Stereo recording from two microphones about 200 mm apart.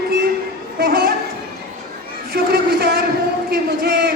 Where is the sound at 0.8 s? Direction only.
50° right (ahead or behind).